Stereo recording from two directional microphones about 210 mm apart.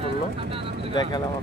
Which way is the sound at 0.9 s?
20° left (ahead or behind).